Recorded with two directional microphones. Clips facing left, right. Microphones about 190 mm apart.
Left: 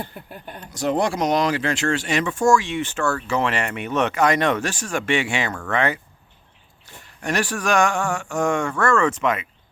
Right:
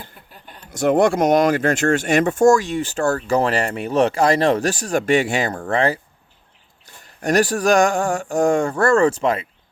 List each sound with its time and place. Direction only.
0.3 s speech: 55° left (ahead or behind)
0.7 s speech: 50° right (ahead or behind); by 6.0 s 30° right (ahead or behind)
7.2 s speech: 40° right (ahead or behind)